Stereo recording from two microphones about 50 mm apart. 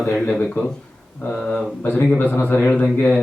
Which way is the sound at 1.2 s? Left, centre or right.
Left.